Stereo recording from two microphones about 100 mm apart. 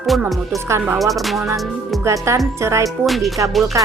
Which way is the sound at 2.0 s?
30° right (ahead or behind).